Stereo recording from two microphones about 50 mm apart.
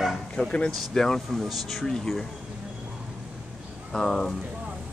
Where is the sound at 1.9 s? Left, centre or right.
Centre.